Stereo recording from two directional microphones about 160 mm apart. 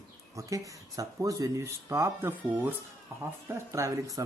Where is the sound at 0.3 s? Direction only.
20° right (ahead or behind).